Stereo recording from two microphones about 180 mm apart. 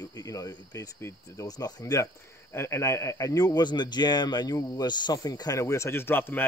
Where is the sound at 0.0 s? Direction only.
20° left (ahead or behind).